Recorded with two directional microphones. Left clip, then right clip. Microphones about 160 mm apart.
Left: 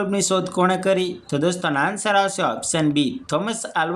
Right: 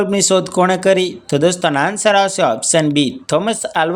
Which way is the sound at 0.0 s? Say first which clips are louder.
Right 7 dB; 35° right (ahead or behind).